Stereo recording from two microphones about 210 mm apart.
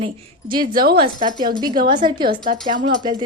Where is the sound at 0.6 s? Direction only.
45° right (ahead or behind).